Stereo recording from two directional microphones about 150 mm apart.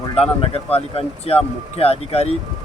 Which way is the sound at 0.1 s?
40° left (ahead or behind).